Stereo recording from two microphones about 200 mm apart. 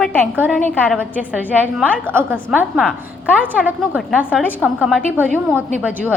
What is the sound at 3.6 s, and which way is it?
A woman's voice, 10° right (ahead or behind).